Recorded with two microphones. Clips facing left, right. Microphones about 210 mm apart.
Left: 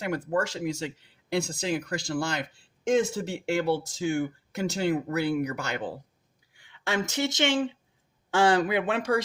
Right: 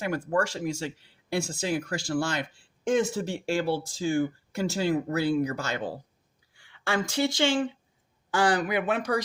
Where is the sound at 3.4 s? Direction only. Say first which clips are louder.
Left 2 dB; 20° left (ahead or behind).